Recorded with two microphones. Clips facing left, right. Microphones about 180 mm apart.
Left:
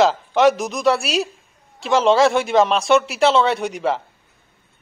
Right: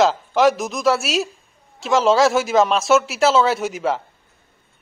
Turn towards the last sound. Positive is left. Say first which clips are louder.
# even
turn(degrees=0)  # may be behind; listen again after turning